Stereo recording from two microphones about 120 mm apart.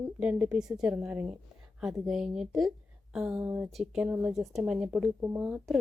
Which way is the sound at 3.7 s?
Centre (ahead or behind).